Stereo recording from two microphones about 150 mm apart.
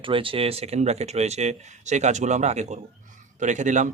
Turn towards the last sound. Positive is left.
turn(degrees=-55)  # may be behind; listen again after turning